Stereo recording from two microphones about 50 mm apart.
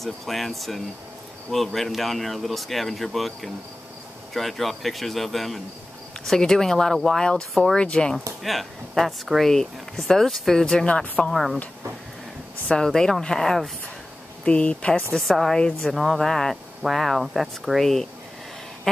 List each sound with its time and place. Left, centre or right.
0.0 s speech: centre
8.4 s speech: centre
11.2 s speech: centre
12.6 s speech: centre
14.4 s speech: left
15.1 s speech: centre
15.9 s speech: centre